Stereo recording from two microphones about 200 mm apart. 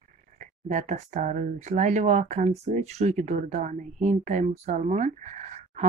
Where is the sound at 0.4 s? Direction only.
35° right (ahead or behind).